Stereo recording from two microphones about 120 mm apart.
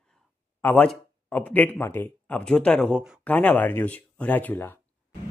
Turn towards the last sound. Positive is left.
turn(degrees=15)  # may be behind; listen again after turning